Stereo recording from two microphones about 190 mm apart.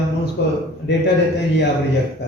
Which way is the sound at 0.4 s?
60° left (ahead or behind).